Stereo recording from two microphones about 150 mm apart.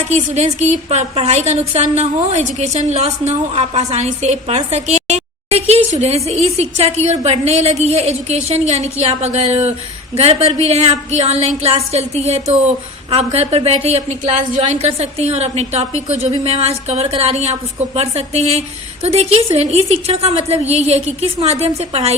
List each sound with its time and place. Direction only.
0.1 s a woman's voice: 50° right (ahead or behind)